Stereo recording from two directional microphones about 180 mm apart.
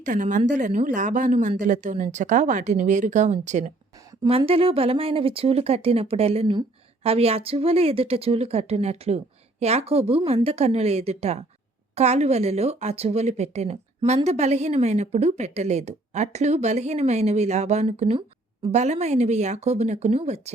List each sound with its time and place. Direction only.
0.0 s a woman's voice: 45° right (ahead or behind)